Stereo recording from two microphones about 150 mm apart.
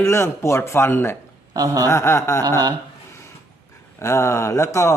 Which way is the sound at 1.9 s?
20° left (ahead or behind).